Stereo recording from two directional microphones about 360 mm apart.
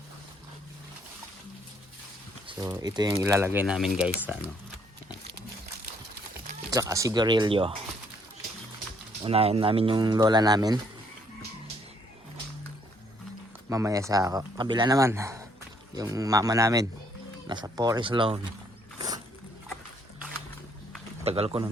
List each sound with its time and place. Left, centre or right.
2.5 s speech: centre
6.5 s speech: centre
9.2 s speech: centre
13.7 s speech: centre
21.2 s speech: centre